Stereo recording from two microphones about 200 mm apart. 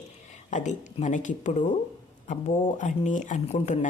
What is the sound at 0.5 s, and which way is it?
Speech, 35° left (ahead or behind).